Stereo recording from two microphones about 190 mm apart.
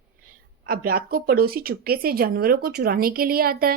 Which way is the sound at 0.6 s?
50° right (ahead or behind).